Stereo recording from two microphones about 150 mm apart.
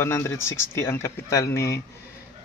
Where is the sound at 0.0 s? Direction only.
15° left (ahead or behind).